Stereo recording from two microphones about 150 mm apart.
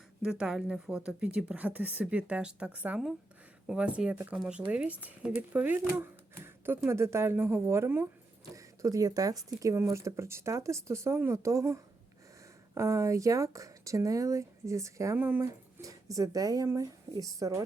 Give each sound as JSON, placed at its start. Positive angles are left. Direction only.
{"t": 0.2, "sound": "speech", "side_deg": -5}